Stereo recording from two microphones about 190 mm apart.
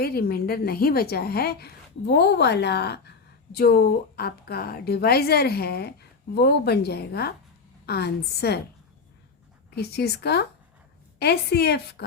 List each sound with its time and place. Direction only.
0.0 s a woman's voice: 55° left (ahead or behind)
9.7 s a woman's voice: 60° left (ahead or behind)